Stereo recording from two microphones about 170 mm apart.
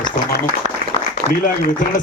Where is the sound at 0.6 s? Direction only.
40° right (ahead or behind).